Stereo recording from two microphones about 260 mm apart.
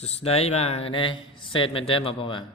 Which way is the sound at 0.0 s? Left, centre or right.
Left.